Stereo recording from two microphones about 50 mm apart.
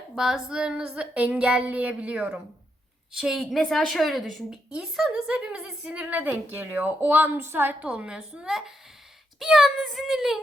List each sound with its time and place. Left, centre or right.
0.2 s a woman's voice: centre
3.2 s a woman's voice: centre
4.8 s a woman's voice: centre; by 7.3 s right
7.3 s a woman's voice: right
7.8 s a woman's voice: right
9.4 s speech: centre